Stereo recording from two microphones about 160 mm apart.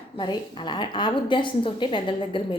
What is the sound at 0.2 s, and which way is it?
A woman's voice, 30° left (ahead or behind).